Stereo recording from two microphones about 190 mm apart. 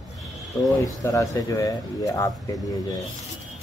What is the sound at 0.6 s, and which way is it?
Speech, 20° left (ahead or behind).